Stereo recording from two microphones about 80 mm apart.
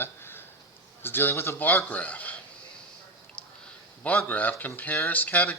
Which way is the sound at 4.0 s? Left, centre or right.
Centre.